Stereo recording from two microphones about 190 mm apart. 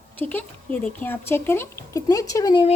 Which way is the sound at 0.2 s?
10° left (ahead or behind).